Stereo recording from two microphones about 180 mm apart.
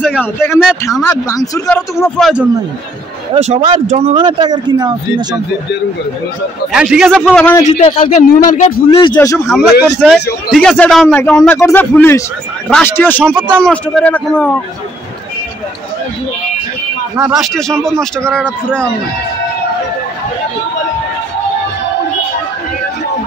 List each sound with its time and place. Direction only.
0.0 s a sound: centre (ahead or behind)
1.0 s speech: 20° left (ahead or behind)
1.7 s speech: 5° left (ahead or behind)
3.3 s speech: 35° right (ahead or behind)
6.7 s speech: 5° right (ahead or behind)
7.6 s a man's voice: 40° left (ahead or behind)
8.9 s speech: 25° left (ahead or behind)
9.5 s speech: centre (ahead or behind)
13.2 s speech: 10° right (ahead or behind)
13.6 s speech: 5° left (ahead or behind)
17.2 s speech: centre (ahead or behind)